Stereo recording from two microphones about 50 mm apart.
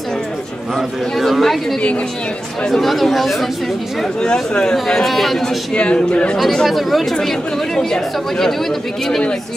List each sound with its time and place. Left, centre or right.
0.7 s speech: centre
4.2 s speech: centre
4.8 s speech: centre
5.8 s speech: left
6.3 s speech: centre